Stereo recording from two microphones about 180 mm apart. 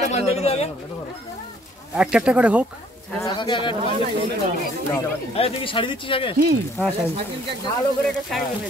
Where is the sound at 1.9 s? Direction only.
5° right (ahead or behind).